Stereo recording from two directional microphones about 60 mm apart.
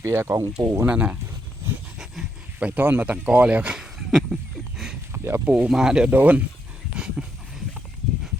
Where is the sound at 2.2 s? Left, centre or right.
Centre.